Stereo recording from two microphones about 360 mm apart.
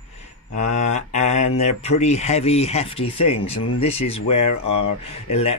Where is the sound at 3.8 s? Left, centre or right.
Centre.